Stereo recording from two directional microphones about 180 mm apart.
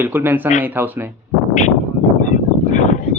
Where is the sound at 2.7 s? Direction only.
40° left (ahead or behind).